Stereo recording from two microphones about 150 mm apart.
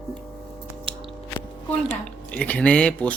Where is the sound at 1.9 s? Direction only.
10° left (ahead or behind).